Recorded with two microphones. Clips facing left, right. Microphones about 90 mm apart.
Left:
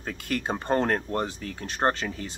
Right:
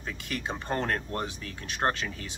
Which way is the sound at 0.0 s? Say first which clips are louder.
Left 5 dB; 50° left (ahead or behind).